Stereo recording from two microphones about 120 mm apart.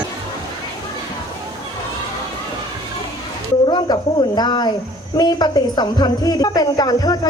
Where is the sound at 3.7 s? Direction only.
40° left (ahead or behind).